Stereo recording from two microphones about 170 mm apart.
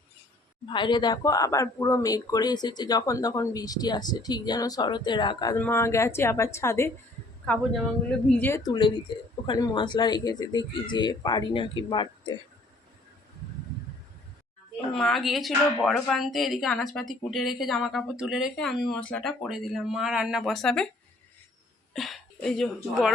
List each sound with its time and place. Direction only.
0.7 s speech: 25° left (ahead or behind)
5.5 s a woman's voice: 15° left (ahead or behind)
14.9 s a woman's voice: centre (ahead or behind)
21.9 s speech: centre (ahead or behind)